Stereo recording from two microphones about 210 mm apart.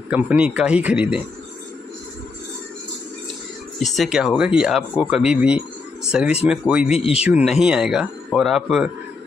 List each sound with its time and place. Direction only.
0.1 s speech: 5° right (ahead or behind)
3.8 s speech: centre (ahead or behind)
7.0 s speech: 30° left (ahead or behind)
7.2 s speech: 5° right (ahead or behind)